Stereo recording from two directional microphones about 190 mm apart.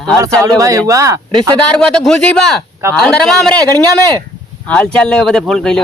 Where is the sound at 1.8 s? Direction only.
5° left (ahead or behind).